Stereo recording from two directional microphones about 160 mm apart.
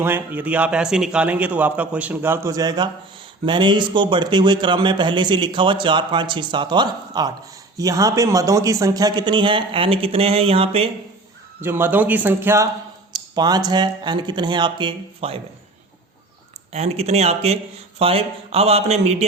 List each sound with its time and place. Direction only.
0.0 s a man's voice: 10° right (ahead or behind); by 10.8 s 40° right (ahead or behind)
11.6 s a man's voice: 15° right (ahead or behind)
13.1 s speech: 25° right (ahead or behind)
16.7 s a man's voice: 40° right (ahead or behind)